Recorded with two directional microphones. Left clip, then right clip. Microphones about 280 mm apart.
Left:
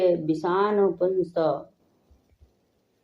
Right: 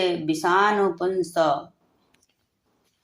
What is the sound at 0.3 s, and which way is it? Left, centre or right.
Speech, right.